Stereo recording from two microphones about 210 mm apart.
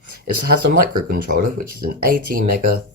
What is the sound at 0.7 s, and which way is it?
Speech, 45° right (ahead or behind).